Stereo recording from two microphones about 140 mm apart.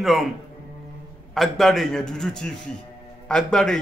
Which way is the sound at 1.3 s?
Centre (ahead or behind).